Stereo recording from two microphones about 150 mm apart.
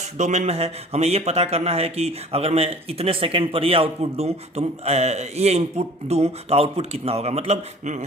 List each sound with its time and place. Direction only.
0.2 s speech: 50° right (ahead or behind)